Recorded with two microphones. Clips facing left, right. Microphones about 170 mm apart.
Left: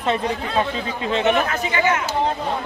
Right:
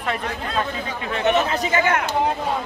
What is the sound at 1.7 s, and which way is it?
Speech, 55° right (ahead or behind).